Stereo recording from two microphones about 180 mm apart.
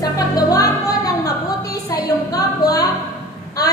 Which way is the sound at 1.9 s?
20° left (ahead or behind).